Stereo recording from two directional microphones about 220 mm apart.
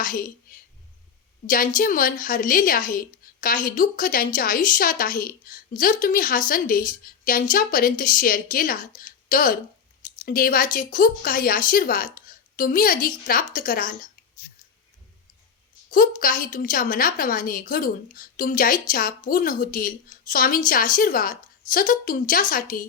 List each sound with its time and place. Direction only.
0.0 s a woman's voice: 40° left (ahead or behind)
1.5 s a woman's voice: 40° left (ahead or behind)
15.9 s a woman's voice: 40° left (ahead or behind)